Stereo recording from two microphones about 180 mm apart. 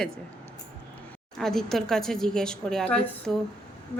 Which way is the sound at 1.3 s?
Centre (ahead or behind).